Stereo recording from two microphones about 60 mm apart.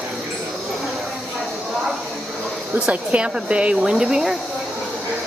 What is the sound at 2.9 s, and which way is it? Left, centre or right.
Speech, centre.